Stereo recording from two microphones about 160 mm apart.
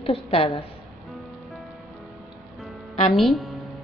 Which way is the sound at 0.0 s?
35° left (ahead or behind).